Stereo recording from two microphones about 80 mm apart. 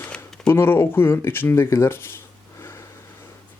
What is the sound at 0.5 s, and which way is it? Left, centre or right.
Speech, left.